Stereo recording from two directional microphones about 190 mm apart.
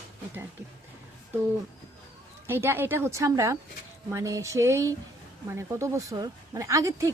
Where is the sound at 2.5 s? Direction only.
10° right (ahead or behind).